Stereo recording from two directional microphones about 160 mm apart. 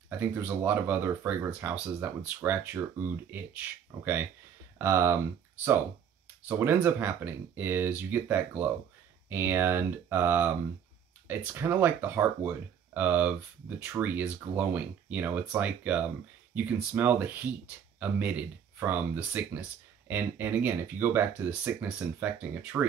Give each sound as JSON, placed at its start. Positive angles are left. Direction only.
{"t": 0.3, "sound": "speech", "side_deg": -10}
{"t": 6.4, "sound": "speech", "side_deg": -10}